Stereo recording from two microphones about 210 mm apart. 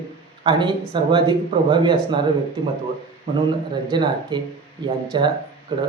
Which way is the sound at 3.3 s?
25° right (ahead or behind).